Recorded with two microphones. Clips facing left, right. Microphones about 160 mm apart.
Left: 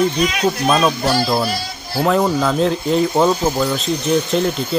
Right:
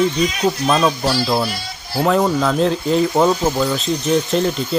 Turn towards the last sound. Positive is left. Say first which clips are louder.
# even
turn(degrees=0)  # may be behind; listen again after turning